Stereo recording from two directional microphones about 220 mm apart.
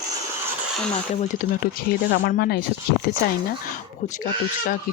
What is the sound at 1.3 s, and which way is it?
Speech, 40° left (ahead or behind).